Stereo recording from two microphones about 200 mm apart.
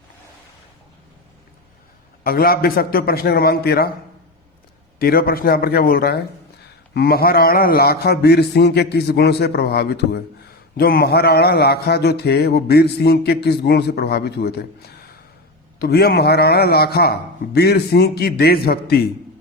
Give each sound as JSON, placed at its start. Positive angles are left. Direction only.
{"t": 2.2, "sound": "a man's voice", "side_deg": 50}
{"t": 4.9, "sound": "a man's voice", "side_deg": 50}